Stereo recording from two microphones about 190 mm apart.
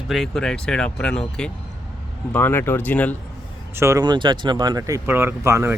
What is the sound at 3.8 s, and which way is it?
Speech, 15° right (ahead or behind).